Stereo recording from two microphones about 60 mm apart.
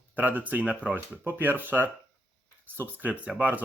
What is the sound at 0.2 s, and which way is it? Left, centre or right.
Speech, right.